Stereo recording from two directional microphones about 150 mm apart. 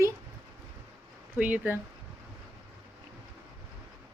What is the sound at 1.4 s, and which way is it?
Speech, 10° right (ahead or behind).